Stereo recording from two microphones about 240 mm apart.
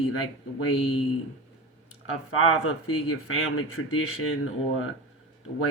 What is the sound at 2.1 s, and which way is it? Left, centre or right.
Speech, left.